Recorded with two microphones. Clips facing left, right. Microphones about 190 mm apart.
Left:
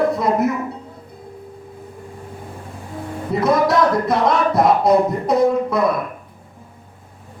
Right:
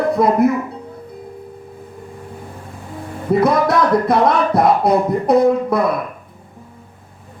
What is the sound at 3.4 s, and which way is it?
Speech, 55° right (ahead or behind).